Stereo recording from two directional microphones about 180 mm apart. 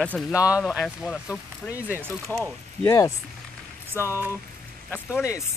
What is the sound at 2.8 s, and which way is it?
Speech, 15° left (ahead or behind).